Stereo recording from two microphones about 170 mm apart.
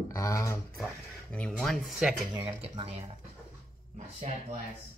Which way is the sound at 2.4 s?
30° right (ahead or behind).